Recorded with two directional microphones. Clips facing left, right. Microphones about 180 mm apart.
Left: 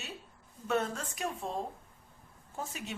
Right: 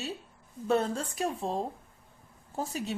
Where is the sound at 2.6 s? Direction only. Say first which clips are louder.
Right 7 dB; 35° right (ahead or behind).